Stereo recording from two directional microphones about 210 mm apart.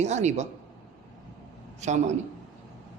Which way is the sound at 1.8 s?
35° right (ahead or behind).